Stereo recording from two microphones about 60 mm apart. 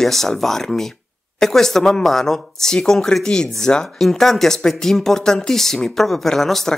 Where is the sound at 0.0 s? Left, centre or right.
Centre.